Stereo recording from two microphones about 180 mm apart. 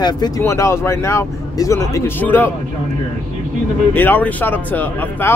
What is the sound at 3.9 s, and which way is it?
A man's voice, 10° left (ahead or behind).